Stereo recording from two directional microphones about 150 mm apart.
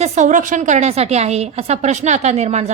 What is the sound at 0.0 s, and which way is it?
A woman's voice, 55° right (ahead or behind).